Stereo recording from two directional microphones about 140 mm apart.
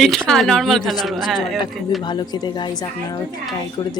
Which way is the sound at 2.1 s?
30° left (ahead or behind).